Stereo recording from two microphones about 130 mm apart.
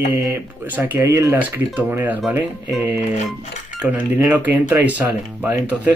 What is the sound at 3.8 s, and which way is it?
Speech, 10° right (ahead or behind).